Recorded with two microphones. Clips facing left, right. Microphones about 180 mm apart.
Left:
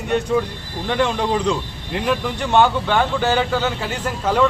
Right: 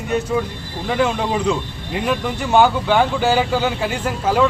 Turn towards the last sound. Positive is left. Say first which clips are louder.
# right 1 dB
turn(degrees=-10)  # may be behind; listen again after turning